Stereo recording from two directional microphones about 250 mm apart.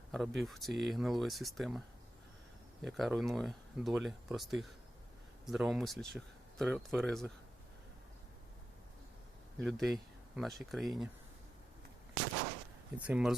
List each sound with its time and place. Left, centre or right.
0.1 s speech: centre
2.8 s speech: centre
9.6 s speech: centre
13.0 s speech: centre